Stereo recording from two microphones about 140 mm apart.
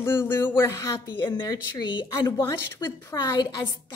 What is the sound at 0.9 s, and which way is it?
A woman's voice, 35° left (ahead or behind).